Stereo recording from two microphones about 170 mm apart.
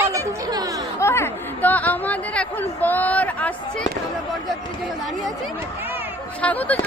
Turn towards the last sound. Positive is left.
turn(degrees=10)  # may be behind; listen again after turning